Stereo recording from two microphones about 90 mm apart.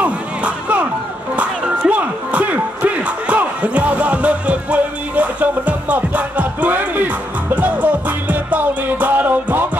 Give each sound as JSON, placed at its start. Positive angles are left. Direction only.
{"t": 0.0, "sound": "crowd", "side_deg": -15}
{"t": 1.3, "sound": "music", "side_deg": -15}